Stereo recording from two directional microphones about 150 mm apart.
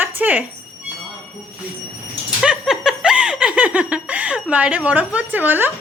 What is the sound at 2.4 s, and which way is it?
Snicker, 5° right (ahead or behind).